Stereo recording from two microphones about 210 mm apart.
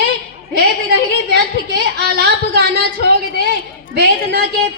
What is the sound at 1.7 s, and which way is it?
Speech, 45° right (ahead or behind).